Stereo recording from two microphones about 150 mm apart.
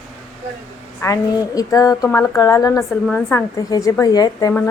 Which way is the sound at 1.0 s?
25° left (ahead or behind).